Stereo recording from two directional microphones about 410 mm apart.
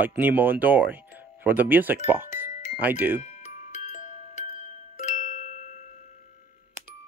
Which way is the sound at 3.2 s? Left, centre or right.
Centre.